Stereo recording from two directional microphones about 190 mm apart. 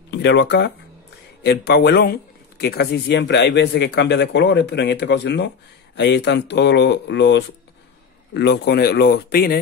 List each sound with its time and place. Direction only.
0.1 s a man's voice: 65° left (ahead or behind)